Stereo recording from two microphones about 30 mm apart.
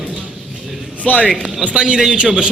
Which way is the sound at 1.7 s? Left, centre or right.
Right.